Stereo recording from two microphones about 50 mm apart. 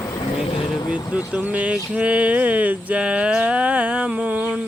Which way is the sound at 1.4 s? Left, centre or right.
Right.